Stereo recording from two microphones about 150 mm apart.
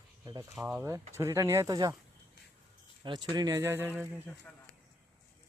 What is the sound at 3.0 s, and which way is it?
Speech, 30° right (ahead or behind).